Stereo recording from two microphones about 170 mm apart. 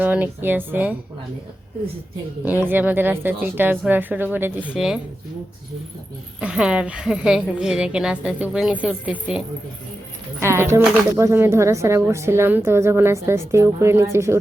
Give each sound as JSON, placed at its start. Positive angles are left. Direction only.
{"t": 0.0, "sound": "speech", "side_deg": -10}
{"t": 2.4, "sound": "a woman's voice", "side_deg": -10}
{"t": 6.4, "sound": "a woman's voice", "side_deg": -5}
{"t": 10.4, "sound": "speech", "side_deg": -15}